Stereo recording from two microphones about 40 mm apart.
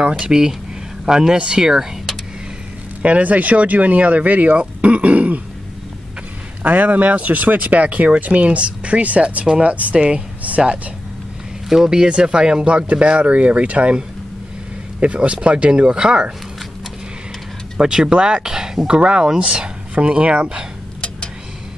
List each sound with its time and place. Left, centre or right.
0.2 s speech: centre
3.0 s speech: right
6.6 s speech: right
9.9 s speech: right
10.4 s a sound: right
11.7 s speech: centre
17.7 s speech: centre
18.9 s speech: right